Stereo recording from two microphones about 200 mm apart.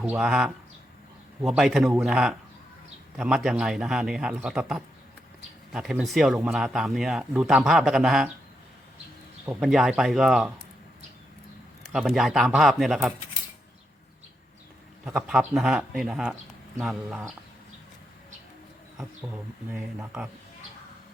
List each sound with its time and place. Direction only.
0.0 s speech: 5° right (ahead or behind)
9.5 s speech: centre (ahead or behind)
11.9 s speech: centre (ahead or behind)
15.0 s speech: 5° right (ahead or behind)